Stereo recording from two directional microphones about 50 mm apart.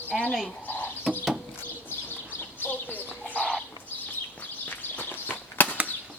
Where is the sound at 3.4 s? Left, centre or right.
Centre.